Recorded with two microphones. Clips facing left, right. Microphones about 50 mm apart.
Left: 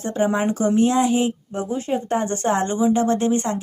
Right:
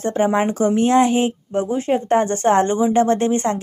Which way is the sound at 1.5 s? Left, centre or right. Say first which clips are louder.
Right 5 dB; right.